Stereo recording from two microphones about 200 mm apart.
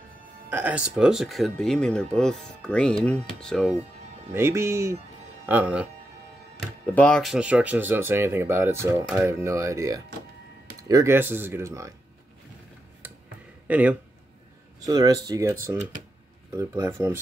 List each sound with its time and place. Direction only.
0.5 s speech: 10° right (ahead or behind)
4.3 s speech: 15° right (ahead or behind)
7.0 s speech: 5° left (ahead or behind); by 11.9 s 15° right (ahead or behind)
13.7 s speech: 5° right (ahead or behind)
14.8 s speech: 20° right (ahead or behind)
16.5 s speech: 15° right (ahead or behind)